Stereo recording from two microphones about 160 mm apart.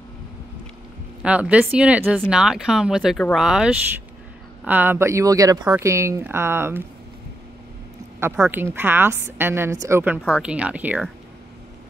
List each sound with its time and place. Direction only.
1.2 s a woman's voice: 10° right (ahead or behind)
8.2 s a woman's voice: 15° right (ahead or behind)